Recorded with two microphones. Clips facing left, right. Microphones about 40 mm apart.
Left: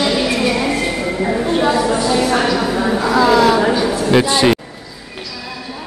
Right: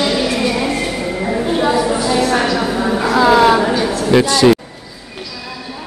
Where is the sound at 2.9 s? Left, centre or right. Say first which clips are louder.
Right 1 dB; centre.